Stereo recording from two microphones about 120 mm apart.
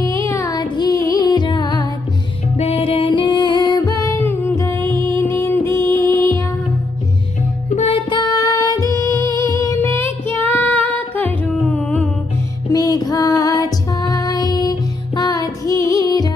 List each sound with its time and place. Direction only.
0.0 s music: 25° left (ahead or behind)
2.5 s music: 60° left (ahead or behind); by 4.2 s 30° left (ahead or behind)
4.2 s music: 15° left (ahead or behind)
7.7 s music: 60° left (ahead or behind)
8.1 s music: 35° left (ahead or behind); by 12.0 s 10° left (ahead or behind)
12.7 s music: 30° left (ahead or behind)